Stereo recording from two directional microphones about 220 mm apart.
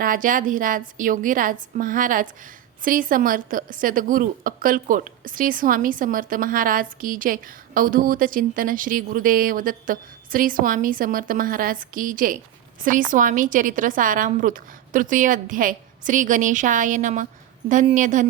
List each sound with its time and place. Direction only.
0.0 s a woman's voice: 40° right (ahead or behind)